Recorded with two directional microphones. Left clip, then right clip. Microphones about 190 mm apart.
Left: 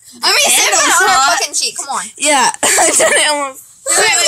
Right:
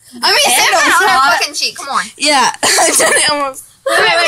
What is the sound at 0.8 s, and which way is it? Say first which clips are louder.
Speech: right 1 dB; 35° left (ahead or behind).